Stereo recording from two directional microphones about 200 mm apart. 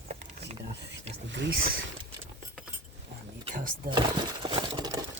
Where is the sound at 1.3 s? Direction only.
60° right (ahead or behind).